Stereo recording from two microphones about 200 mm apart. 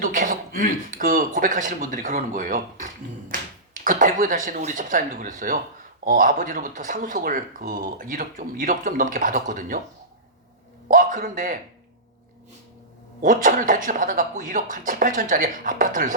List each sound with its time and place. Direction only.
0.0 s speech: 40° right (ahead or behind)
10.8 s a man's voice: 40° right (ahead or behind)
13.2 s speech: 40° right (ahead or behind)